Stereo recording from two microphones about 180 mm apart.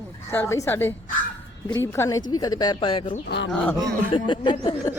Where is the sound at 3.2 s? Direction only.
75° left (ahead or behind).